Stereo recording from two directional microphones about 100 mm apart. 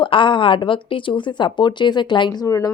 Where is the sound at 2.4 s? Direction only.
35° left (ahead or behind).